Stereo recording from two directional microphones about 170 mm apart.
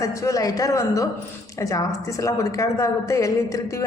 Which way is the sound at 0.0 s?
20° left (ahead or behind).